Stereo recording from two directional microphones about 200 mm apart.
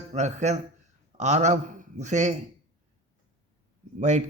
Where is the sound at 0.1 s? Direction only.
35° right (ahead or behind).